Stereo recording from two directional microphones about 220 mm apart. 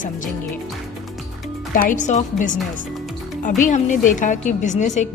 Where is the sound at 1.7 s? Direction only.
35° left (ahead or behind).